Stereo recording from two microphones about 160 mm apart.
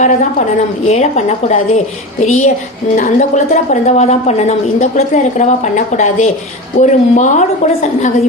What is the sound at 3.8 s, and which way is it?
A woman's voice, 45° left (ahead or behind).